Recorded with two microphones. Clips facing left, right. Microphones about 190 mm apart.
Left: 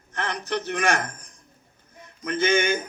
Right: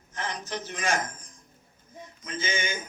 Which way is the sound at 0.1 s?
65° left (ahead or behind).